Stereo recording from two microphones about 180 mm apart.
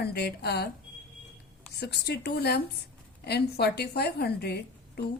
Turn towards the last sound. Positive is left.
turn(degrees=65)  # may be behind; listen again after turning